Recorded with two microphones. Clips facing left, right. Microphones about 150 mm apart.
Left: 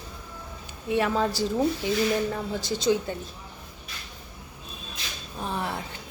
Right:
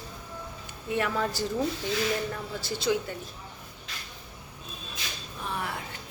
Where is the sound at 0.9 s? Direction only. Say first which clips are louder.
Left 4 dB; 20° left (ahead or behind).